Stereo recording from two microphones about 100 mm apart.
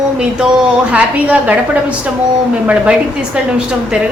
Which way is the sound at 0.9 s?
15° right (ahead or behind).